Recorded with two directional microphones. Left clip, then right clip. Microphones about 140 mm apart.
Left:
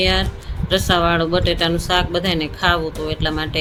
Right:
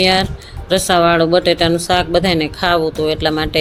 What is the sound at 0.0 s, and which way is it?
Speech, 35° right (ahead or behind).